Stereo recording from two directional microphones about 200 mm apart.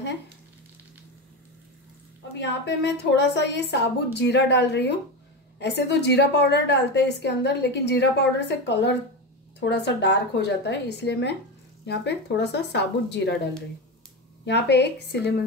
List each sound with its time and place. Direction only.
2.3 s a woman's voice: 60° left (ahead or behind)
14.4 s a woman's voice: 60° left (ahead or behind)